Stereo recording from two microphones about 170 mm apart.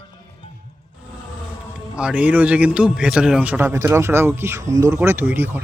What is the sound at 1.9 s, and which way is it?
A man's voice, 5° right (ahead or behind).